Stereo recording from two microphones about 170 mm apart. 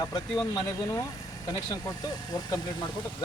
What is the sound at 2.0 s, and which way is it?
Speech, 25° left (ahead or behind).